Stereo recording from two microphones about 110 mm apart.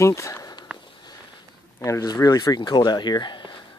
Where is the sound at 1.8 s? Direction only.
30° left (ahead or behind).